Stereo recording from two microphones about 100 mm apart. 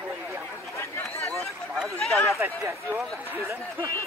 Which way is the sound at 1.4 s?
Centre (ahead or behind).